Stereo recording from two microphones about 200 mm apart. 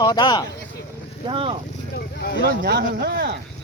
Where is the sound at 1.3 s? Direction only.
25° right (ahead or behind).